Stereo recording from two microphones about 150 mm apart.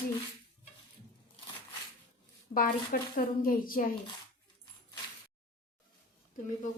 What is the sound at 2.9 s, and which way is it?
A woman's voice, 80° left.